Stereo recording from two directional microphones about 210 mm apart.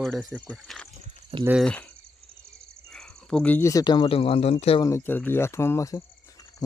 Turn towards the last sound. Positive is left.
turn(degrees=15)  # may be behind; listen again after turning